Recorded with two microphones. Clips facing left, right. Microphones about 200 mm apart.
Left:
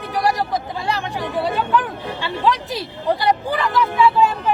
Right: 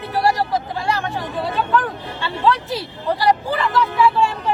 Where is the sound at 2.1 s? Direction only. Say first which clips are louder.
Right 1 dB; 15° left (ahead or behind).